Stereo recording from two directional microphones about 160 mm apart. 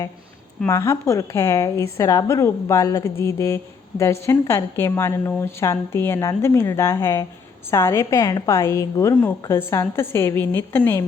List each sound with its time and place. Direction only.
0.7 s a woman's voice: 15° left (ahead or behind)